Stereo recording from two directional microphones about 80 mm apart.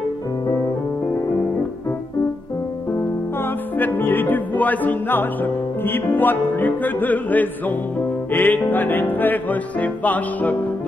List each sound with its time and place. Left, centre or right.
3.4 s music: left